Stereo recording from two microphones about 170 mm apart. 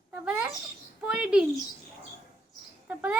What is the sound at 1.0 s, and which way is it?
Speech, 5° right (ahead or behind).